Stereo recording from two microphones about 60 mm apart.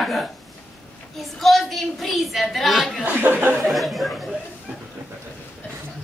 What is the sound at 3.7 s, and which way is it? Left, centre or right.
Speech, centre.